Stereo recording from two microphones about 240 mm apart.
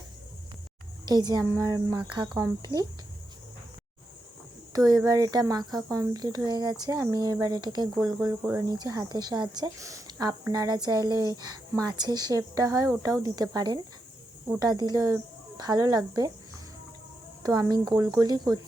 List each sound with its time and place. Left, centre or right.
1.0 s speech: centre
4.7 s speech: centre
17.4 s speech: centre